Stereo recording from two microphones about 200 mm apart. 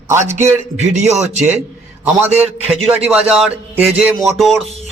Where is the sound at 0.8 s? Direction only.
35° right (ahead or behind).